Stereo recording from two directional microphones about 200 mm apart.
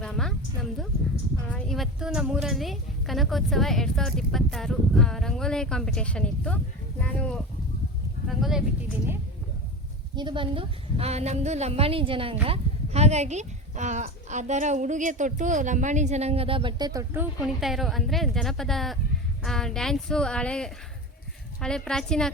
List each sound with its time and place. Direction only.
0.0 s music: centre (ahead or behind)
1.5 s a woman's voice: 5° left (ahead or behind)
10.2 s a woman's voice: 25° right (ahead or behind)
17.4 s a woman's voice: centre (ahead or behind)